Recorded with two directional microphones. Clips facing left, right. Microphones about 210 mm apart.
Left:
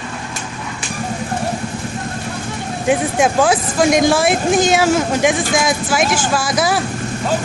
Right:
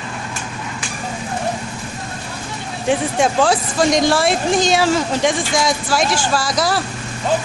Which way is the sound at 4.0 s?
50° left (ahead or behind).